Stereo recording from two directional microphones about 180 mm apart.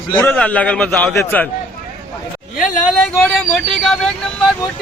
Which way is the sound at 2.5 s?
50° left (ahead or behind).